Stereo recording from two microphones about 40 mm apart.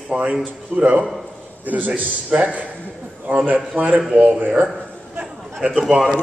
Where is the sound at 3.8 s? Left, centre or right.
Right.